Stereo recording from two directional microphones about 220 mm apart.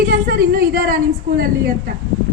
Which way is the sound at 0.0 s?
45° right (ahead or behind).